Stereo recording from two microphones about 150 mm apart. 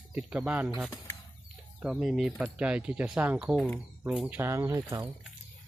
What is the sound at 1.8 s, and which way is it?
Speech, 5° right (ahead or behind).